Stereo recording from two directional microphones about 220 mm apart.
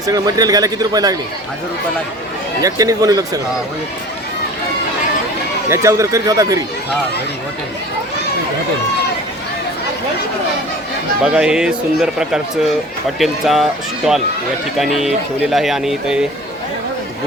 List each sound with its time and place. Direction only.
0.0 s a man's voice: 15° right (ahead or behind)
2.6 s a man's voice: 15° right (ahead or behind)
5.6 s a man's voice: 15° right (ahead or behind)
11.3 s speech: 5° right (ahead or behind)